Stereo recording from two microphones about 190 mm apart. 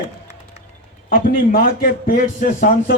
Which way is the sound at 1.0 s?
50° left (ahead or behind).